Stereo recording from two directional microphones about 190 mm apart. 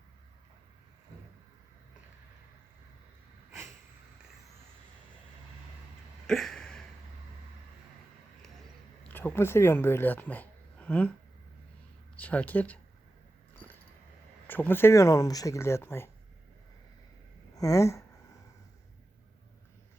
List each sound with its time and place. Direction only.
6.2 s a sound: centre (ahead or behind)
9.0 s speech: 10° left (ahead or behind)
12.1 s speech: 5° left (ahead or behind)
13.6 s a sound: 10° left (ahead or behind)
14.4 s speech: 10° left (ahead or behind)
17.5 s speech: 20° left (ahead or behind)